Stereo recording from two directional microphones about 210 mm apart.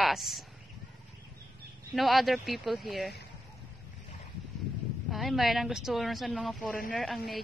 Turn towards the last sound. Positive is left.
turn(degrees=0)  # may be behind; listen again after turning